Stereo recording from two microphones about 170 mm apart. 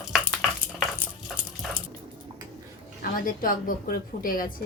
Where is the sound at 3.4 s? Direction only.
55° left (ahead or behind).